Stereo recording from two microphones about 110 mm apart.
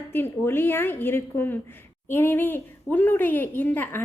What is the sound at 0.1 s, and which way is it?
A woman's voice, 20° left (ahead or behind).